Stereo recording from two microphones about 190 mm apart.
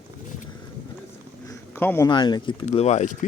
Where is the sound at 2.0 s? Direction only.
20° left (ahead or behind).